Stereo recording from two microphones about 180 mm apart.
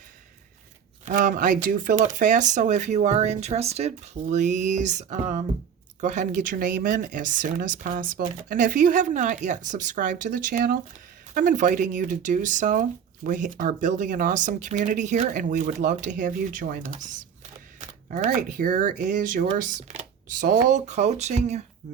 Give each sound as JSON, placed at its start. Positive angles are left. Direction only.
{"t": 1.0, "sound": "speech", "side_deg": -45}